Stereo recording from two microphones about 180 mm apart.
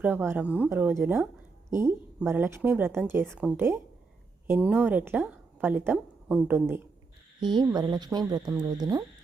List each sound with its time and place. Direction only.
0.0 s a woman's voice: 10° right (ahead or behind)
7.3 s speech: 25° right (ahead or behind)